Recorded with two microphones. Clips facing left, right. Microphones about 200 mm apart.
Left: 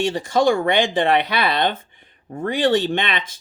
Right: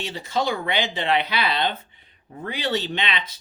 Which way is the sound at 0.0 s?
50° left (ahead or behind).